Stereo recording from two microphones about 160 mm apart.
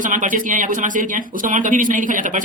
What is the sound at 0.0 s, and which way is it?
Speech, 55° right (ahead or behind).